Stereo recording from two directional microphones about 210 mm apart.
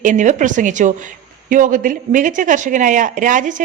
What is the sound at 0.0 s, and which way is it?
A woman's voice, 35° right (ahead or behind).